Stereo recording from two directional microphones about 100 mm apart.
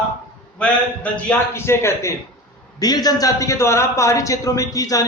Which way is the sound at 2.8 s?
40° left (ahead or behind).